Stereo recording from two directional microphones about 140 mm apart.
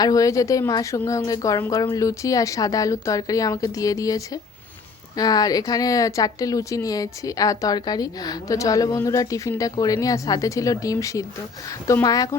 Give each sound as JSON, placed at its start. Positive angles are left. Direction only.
{"t": 0.0, "sound": "speech", "side_deg": 25}